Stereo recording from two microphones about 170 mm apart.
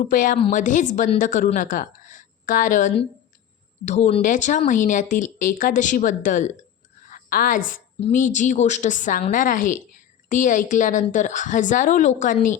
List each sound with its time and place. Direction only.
0.0 s a woman's voice: 50° left (ahead or behind)